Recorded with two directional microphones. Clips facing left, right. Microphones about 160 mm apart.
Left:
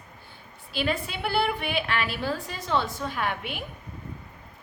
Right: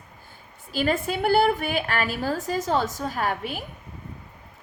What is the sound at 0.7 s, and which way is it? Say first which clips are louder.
A woman's voice: right 4 dB; 45° right (ahead or behind).